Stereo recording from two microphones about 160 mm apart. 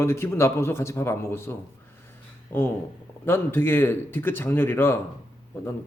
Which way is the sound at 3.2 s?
15° left (ahead or behind).